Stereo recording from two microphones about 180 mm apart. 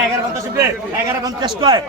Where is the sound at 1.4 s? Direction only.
25° right (ahead or behind).